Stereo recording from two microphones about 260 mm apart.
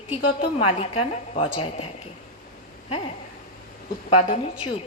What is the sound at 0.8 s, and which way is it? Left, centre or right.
A woman's voice, left.